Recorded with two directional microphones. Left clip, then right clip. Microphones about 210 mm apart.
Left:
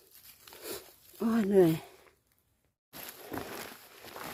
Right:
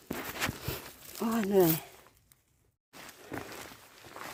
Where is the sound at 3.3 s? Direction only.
15° left (ahead or behind).